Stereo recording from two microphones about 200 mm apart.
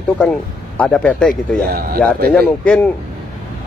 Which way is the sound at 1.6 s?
50° right (ahead or behind).